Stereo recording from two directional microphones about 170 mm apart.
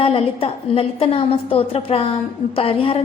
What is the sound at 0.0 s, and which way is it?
A woman's voice, 35° left (ahead or behind).